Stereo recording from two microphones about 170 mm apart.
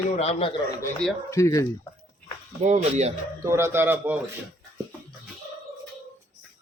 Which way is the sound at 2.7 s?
40° right (ahead or behind).